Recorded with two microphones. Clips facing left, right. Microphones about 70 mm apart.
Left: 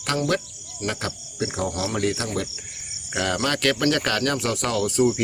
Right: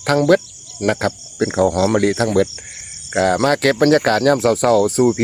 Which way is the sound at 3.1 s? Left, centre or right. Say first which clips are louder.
Right 9 dB; right.